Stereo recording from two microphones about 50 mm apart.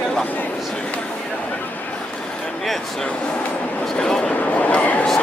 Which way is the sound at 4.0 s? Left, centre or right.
Centre.